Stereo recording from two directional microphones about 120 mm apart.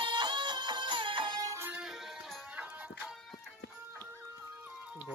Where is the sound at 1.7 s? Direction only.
5° right (ahead or behind).